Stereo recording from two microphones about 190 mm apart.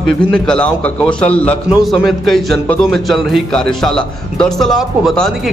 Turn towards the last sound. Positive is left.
turn(degrees=0)  # may be behind; listen again after turning